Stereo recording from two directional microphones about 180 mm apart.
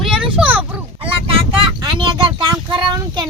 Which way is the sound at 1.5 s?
25° right (ahead or behind).